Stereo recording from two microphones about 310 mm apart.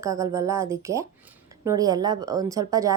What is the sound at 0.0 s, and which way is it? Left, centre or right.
A woman's voice, centre.